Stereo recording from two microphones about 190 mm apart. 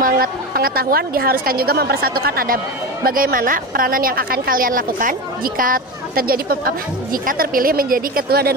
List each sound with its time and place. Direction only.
0.0 s speech: 50° right (ahead or behind)